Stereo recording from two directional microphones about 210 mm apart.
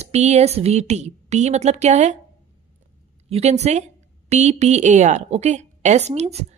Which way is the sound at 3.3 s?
30° right (ahead or behind).